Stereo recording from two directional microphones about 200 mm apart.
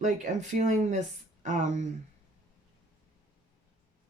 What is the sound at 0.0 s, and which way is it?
Speech, 40° right (ahead or behind).